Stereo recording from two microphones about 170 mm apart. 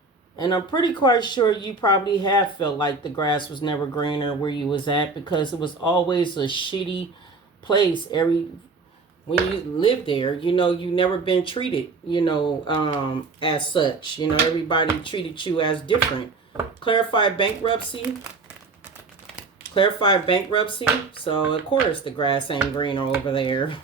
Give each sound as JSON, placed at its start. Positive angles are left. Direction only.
{"t": 0.3, "sound": "speech", "side_deg": 25}
{"t": 9.7, "sound": "speech", "side_deg": 30}
{"t": 16.8, "sound": "speech", "side_deg": 30}
{"t": 19.7, "sound": "speech", "side_deg": 30}